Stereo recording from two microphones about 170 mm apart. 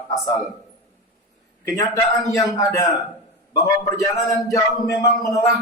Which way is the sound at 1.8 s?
20° left (ahead or behind).